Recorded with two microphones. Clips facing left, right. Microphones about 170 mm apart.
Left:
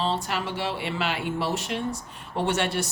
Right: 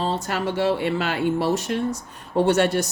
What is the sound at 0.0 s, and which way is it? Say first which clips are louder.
A woman's voice: right 3 dB; 45° right (ahead or behind).